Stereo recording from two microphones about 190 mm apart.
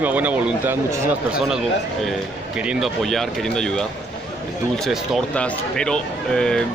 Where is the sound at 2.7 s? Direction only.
Centre (ahead or behind).